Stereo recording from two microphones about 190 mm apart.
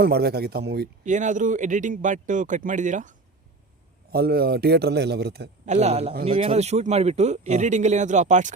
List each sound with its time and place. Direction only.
0.0 s a man's voice: 55° right (ahead or behind)
1.0 s speech: 40° right (ahead or behind)
4.1 s a man's voice: 55° right (ahead or behind)
5.6 s speech: 35° right (ahead or behind)